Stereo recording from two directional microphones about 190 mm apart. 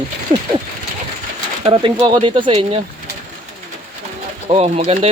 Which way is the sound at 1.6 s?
30° right (ahead or behind).